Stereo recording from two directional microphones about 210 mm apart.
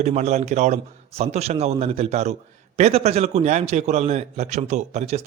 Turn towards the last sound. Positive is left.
turn(degrees=-30)  # may be behind; listen again after turning